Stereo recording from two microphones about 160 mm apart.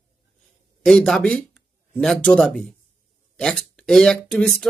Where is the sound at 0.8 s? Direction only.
5° left (ahead or behind).